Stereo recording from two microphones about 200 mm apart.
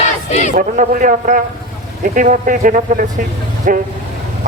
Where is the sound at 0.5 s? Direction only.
40° right (ahead or behind).